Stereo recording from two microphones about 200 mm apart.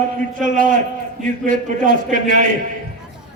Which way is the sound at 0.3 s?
40° right (ahead or behind).